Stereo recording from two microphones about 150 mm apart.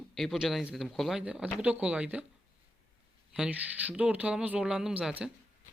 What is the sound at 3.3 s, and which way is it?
Speech, 5° right (ahead or behind).